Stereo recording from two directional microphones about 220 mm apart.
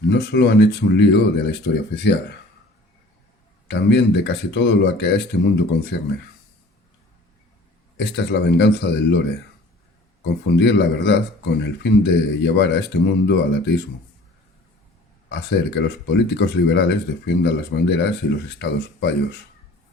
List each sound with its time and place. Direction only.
0.1 s speech: 50° left (ahead or behind)
3.7 s speech: 50° left (ahead or behind)
7.9 s speech: 50° left (ahead or behind)
10.4 s speech: 50° left (ahead or behind)
15.3 s speech: 50° left (ahead or behind)